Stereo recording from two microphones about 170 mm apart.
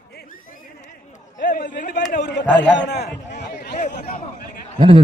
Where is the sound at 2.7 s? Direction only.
85° left.